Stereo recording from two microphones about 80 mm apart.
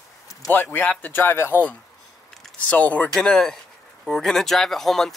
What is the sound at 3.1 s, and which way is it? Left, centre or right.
Speech, centre.